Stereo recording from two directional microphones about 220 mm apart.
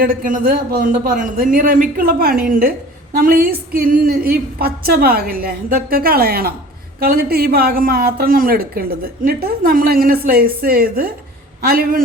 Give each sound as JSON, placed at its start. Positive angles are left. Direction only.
{"t": 0.0, "sound": "a man's voice", "side_deg": -40}